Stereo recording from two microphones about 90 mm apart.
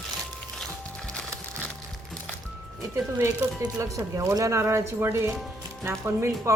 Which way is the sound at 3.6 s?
35° right (ahead or behind).